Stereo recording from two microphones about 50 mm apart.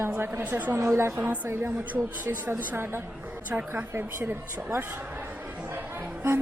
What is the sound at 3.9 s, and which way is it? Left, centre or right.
Speech, right.